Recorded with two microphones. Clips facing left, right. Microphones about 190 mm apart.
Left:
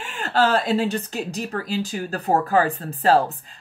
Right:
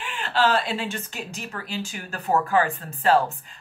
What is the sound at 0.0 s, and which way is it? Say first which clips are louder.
Speech: left 2 dB; 40° left (ahead or behind).